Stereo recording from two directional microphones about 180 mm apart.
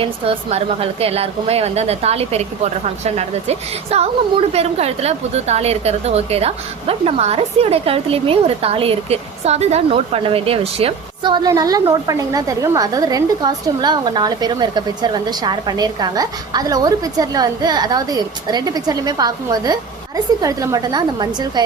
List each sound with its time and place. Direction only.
0.0 s a woman's voice: 30° right (ahead or behind)